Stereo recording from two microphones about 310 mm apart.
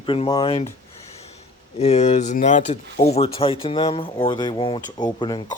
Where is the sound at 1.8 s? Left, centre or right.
Left.